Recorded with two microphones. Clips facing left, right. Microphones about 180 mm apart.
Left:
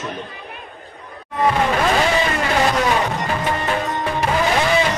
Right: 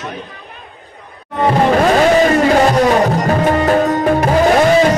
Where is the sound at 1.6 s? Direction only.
40° right (ahead or behind).